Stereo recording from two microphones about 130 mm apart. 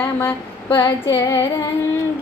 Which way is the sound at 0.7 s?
20° left (ahead or behind).